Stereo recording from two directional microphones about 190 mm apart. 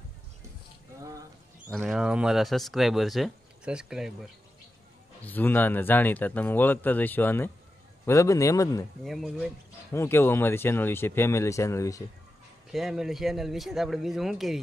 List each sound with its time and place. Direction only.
1.7 s speech: 5° right (ahead or behind)
5.2 s speech: 10° left (ahead or behind)
9.0 s speech: centre (ahead or behind)
9.9 s speech: 10° left (ahead or behind)
12.7 s speech: centre (ahead or behind)